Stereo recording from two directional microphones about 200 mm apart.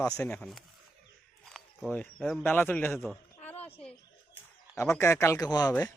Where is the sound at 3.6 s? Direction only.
30° left (ahead or behind).